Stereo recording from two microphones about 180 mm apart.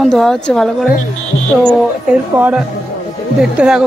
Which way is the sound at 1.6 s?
10° right (ahead or behind).